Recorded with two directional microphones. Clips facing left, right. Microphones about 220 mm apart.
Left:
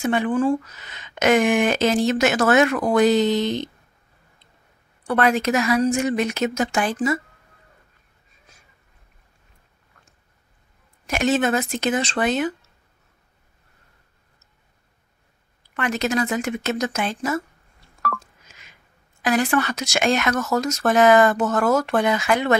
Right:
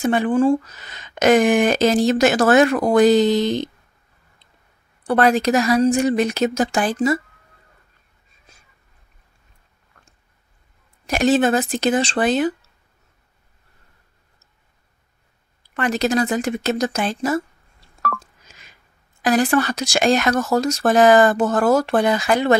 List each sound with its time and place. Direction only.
0.0 s speech: 35° right (ahead or behind)
5.0 s speech: 35° right (ahead or behind)
11.1 s speech: 35° right (ahead or behind)
15.7 s speech: 35° right (ahead or behind)
18.0 s telephone dialing: 35° right (ahead or behind)
19.2 s speech: 35° right (ahead or behind)